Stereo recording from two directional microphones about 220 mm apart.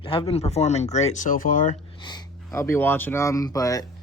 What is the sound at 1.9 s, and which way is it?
Speech, 20° left (ahead or behind).